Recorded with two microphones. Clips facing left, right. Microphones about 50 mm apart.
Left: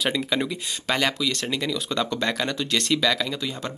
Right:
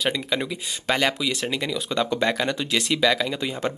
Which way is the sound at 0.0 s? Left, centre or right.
Centre.